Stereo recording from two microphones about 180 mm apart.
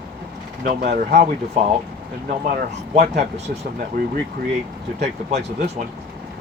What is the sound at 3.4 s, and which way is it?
Speech, 50° right (ahead or behind).